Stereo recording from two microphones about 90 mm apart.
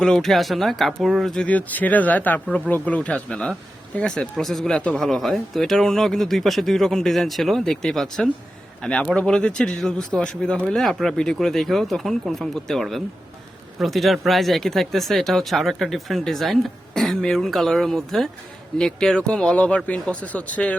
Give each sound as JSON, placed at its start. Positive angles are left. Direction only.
{"t": 0.0, "sound": "speech", "side_deg": 5}
{"t": 1.5, "sound": "speech", "side_deg": 20}